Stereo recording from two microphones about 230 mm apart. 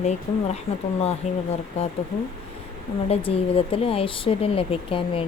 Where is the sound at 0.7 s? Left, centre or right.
Left.